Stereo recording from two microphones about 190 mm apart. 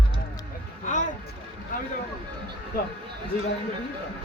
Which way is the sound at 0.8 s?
40° left (ahead or behind).